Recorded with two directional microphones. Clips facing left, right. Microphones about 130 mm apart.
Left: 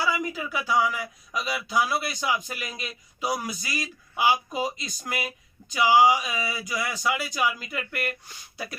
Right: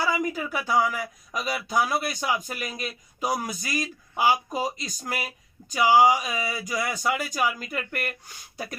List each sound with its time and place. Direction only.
0.0 s speech: 45° right (ahead or behind)